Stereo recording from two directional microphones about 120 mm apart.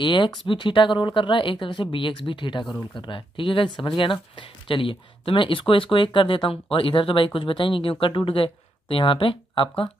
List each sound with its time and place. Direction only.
0.0 s speech: 40° left (ahead or behind)